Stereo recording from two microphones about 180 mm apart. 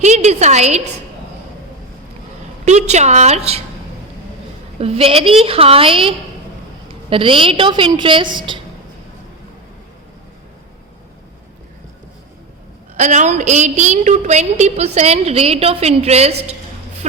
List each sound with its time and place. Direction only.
0.0 s a woman's voice: 40° right (ahead or behind)
2.6 s a woman's voice: 40° right (ahead or behind)
4.8 s a woman's voice: 35° right (ahead or behind)
13.0 s a woman's voice: 40° right (ahead or behind)